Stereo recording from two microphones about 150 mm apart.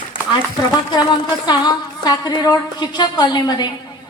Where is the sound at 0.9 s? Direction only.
30° left (ahead or behind).